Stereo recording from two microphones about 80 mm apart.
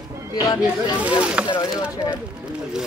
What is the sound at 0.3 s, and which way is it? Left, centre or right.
Speech, left.